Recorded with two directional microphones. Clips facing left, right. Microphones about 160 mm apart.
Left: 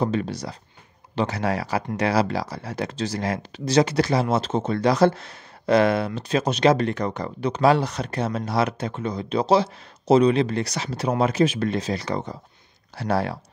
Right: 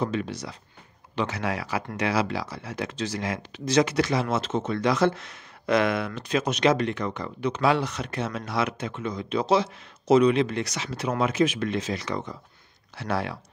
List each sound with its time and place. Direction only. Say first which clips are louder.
0.0 s speech: left 4 dB; 35° left (ahead or behind)